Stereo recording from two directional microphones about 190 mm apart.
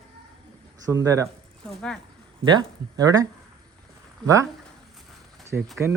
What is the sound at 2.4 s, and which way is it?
Speech, 20° right (ahead or behind).